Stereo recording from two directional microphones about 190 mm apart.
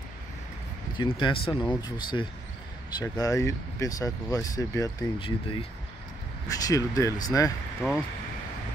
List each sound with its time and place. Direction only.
0.9 s speech: 25° left (ahead or behind)